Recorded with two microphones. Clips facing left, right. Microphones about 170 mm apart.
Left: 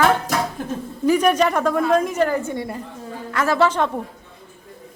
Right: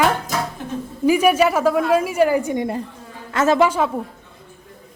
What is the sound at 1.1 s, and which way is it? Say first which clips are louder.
A woman's voice: right 1 dB; 10° right (ahead or behind).